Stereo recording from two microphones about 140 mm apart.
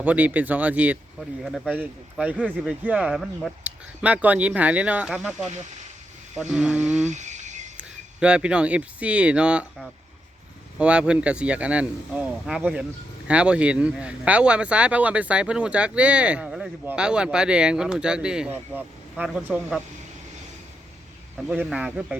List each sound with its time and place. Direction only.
0.0 s speech: 10° right (ahead or behind)
6.3 s mantra: 5° right (ahead or behind)
7.1 s a sound: 60° right (ahead or behind)
7.8 s speech: 5° right (ahead or behind)
21.7 s speech: 5° right (ahead or behind)